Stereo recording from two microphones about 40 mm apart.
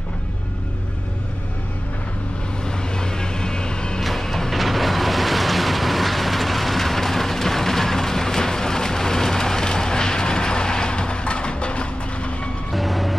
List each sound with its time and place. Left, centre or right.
2.6 s vehicle: centre
4.0 s vehicle: centre; by 12.4 s left
12.7 s vehicle: centre